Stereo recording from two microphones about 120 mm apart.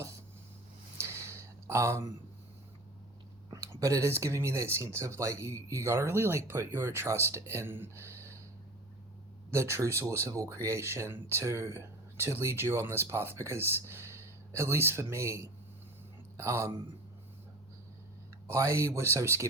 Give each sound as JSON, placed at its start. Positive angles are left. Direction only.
{"t": 0.9, "sound": "a sound", "side_deg": -25}
{"t": 3.5, "sound": "speech", "side_deg": -30}
{"t": 9.5, "sound": "speech", "side_deg": -20}
{"t": 18.4, "sound": "speech", "side_deg": -25}